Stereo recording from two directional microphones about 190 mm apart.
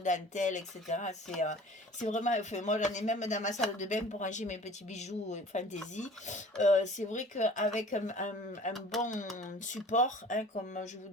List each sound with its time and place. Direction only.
0.0 s speech: 40° left (ahead or behind)